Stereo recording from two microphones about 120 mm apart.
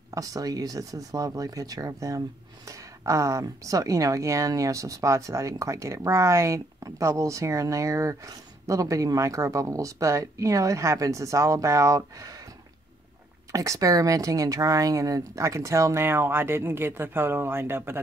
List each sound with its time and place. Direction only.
0.1 s speech: 30° right (ahead or behind)
13.5 s speech: 30° right (ahead or behind)